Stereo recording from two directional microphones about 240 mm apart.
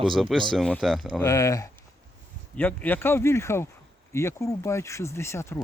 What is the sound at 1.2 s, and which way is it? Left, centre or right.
Speech, centre.